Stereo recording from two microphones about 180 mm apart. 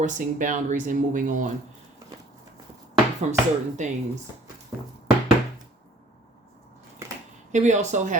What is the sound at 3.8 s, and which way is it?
Speech, 40° right (ahead or behind).